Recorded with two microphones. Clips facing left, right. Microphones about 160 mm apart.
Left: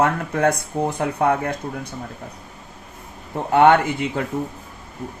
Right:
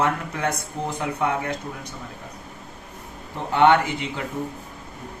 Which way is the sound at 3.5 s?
45° left (ahead or behind).